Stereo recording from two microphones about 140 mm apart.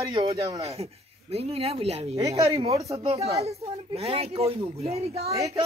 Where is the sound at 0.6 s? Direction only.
45° right (ahead or behind).